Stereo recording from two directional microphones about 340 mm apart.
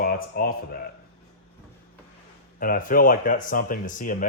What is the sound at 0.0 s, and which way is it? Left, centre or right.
Speech, left.